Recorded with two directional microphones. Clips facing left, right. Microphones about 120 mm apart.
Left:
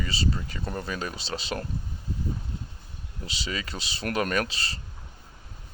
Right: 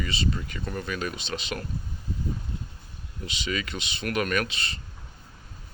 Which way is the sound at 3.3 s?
35° left (ahead or behind).